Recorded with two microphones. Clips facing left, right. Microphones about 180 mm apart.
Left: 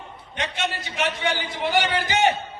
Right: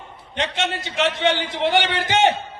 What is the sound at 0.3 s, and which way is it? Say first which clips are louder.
A man's voice: right 4 dB; 70° right (ahead or behind).